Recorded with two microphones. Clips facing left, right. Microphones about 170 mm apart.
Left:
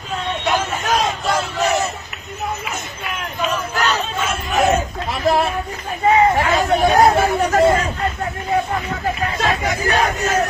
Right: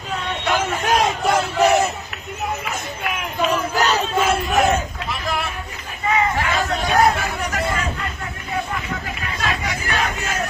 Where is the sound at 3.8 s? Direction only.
35° right (ahead or behind).